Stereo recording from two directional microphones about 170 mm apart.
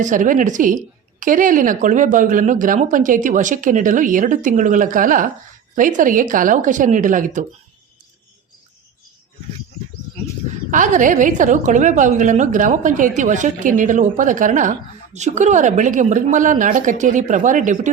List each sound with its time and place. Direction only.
0.0 s a woman's voice: 50° right (ahead or behind)
10.7 s a woman's voice: 50° right (ahead or behind)